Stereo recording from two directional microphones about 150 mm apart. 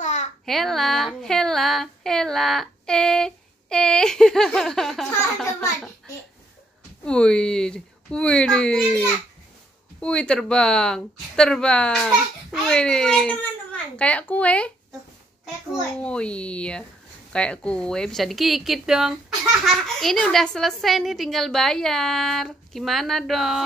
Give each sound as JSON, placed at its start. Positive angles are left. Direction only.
{"t": 0.0, "sound": "babbling", "side_deg": 50}
{"t": 0.5, "sound": "a sound", "side_deg": 0}
{"t": 7.1, "sound": "a woman's voice", "side_deg": 5}
{"t": 16.0, "sound": "a woman's voice", "side_deg": 5}